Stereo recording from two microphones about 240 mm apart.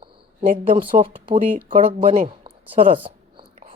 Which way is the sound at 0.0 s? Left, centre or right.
Right.